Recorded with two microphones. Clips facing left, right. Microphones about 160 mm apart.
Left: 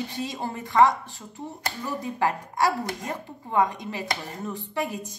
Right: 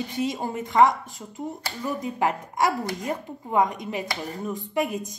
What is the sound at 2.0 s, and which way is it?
A woman's voice, 20° right (ahead or behind).